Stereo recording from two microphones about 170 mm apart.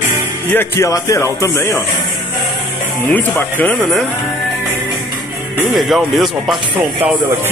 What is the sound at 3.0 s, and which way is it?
Speech, 10° left (ahead or behind).